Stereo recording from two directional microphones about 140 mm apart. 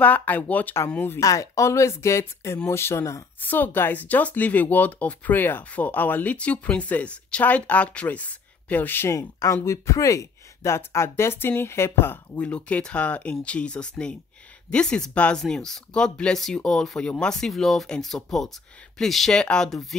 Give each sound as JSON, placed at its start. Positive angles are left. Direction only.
{"t": 0.0, "sound": "speech", "side_deg": 10}